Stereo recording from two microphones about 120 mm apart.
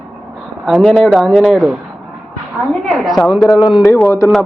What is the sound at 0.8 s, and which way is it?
Speech, 5° right (ahead or behind).